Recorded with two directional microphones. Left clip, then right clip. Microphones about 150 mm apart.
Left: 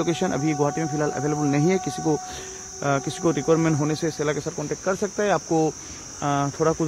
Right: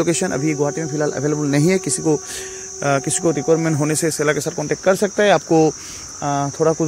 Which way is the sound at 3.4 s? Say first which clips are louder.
Right 3 dB; 5° right (ahead or behind).